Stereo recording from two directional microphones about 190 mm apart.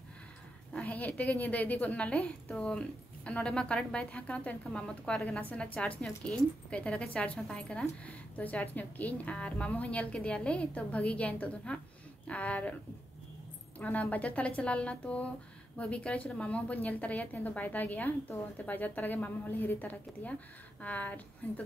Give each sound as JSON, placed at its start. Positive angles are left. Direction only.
{"t": 0.7, "sound": "a woman's voice", "side_deg": 10}
{"t": 13.7, "sound": "a woman's voice", "side_deg": 10}